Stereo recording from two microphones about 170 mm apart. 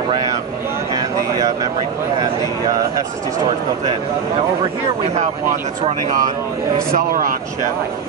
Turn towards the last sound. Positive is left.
turn(degrees=-55)  # may be behind; listen again after turning